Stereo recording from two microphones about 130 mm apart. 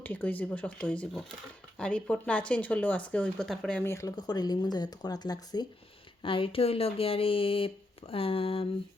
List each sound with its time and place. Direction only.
0.0 s speech: 15° left (ahead or behind)
3.8 s speech: 25° left (ahead or behind)
6.2 s speech: 45° left (ahead or behind)